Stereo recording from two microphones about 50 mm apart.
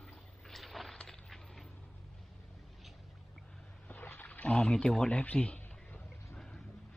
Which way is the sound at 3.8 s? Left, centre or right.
Left.